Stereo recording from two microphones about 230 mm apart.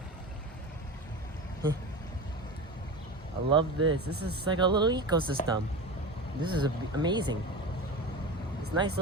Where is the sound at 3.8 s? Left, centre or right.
Right.